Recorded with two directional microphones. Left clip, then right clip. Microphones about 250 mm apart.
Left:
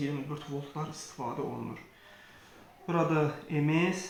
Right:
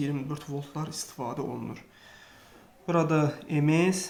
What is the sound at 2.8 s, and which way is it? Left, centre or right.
Speech, right.